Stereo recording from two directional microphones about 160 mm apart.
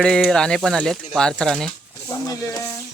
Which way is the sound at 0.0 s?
5° left (ahead or behind).